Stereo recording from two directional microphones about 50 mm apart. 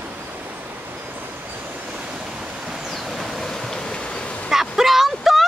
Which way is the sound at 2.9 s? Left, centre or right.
Centre.